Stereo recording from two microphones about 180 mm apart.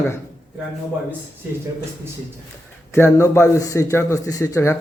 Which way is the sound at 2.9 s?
15° left (ahead or behind).